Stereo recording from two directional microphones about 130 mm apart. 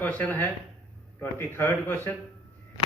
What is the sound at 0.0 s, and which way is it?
Speech, 10° left (ahead or behind).